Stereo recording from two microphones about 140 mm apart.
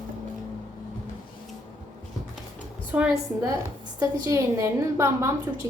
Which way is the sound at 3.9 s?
20° right (ahead or behind).